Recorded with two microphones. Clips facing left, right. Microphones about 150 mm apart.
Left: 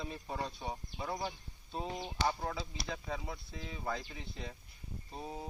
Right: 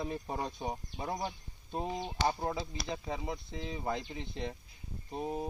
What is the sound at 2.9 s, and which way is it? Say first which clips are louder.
Speech: right 4 dB; 20° right (ahead or behind).